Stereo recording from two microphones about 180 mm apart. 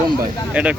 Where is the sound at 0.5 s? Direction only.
10° right (ahead or behind).